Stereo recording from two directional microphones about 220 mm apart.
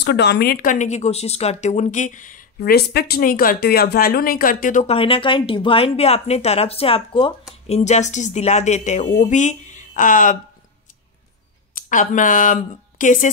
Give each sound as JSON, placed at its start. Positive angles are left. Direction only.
{"t": 0.0, "sound": "speech", "side_deg": 50}
{"t": 11.7, "sound": "speech", "side_deg": 35}